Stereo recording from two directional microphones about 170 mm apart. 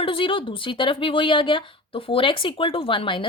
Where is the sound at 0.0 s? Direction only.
30° left (ahead or behind).